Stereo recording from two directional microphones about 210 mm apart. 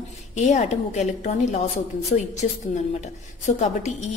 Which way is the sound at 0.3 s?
35° left (ahead or behind).